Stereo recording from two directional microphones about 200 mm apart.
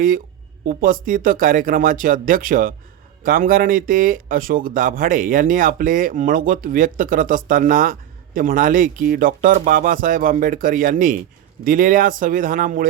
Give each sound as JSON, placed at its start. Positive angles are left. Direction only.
{"t": 0.7, "sound": "speech", "side_deg": -45}